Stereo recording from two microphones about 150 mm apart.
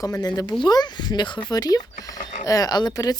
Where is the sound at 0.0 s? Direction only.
25° left (ahead or behind).